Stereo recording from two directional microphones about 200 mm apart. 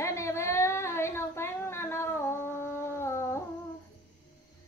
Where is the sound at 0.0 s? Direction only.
15° left (ahead or behind).